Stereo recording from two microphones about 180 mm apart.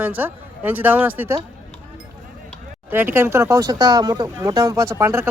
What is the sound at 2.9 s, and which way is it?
Speech, 10° right (ahead or behind).